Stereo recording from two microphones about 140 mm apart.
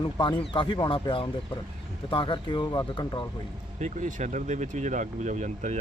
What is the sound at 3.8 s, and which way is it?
Speech, 60° right (ahead or behind).